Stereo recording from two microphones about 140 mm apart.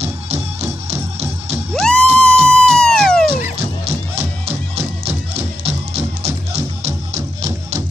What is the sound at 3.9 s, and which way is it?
Music, 45° right (ahead or behind).